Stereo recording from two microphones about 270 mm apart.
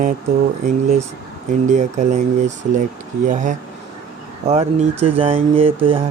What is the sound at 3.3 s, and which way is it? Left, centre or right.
Speech, right.